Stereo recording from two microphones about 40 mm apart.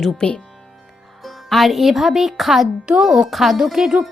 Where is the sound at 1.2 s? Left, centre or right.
Centre.